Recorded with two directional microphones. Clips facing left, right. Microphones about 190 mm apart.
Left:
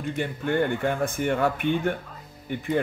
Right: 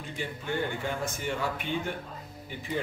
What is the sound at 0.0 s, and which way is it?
Speech, 55° left (ahead or behind).